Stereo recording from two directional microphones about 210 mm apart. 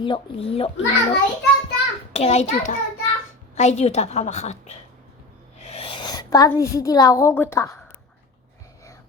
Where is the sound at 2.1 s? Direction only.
30° left (ahead or behind).